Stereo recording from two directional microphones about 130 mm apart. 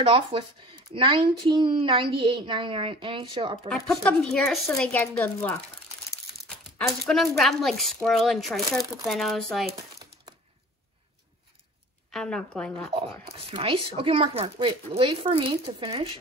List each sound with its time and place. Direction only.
0.0 s speech: 40° right (ahead or behind)
3.6 s a woman's voice: 5° left (ahead or behind)
6.5 s speech: centre (ahead or behind)
12.1 s speech: 5° left (ahead or behind)
13.6 s speech: 45° right (ahead or behind)